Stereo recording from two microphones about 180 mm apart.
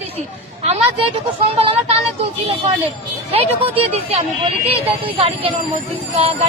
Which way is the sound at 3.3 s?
35° right (ahead or behind).